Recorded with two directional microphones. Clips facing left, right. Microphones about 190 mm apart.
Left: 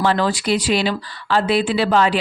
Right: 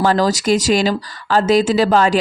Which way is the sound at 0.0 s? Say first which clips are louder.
Right 3 dB; 40° right (ahead or behind).